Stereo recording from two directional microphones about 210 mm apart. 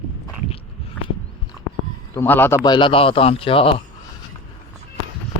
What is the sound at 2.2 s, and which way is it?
A man's voice, 10° left (ahead or behind).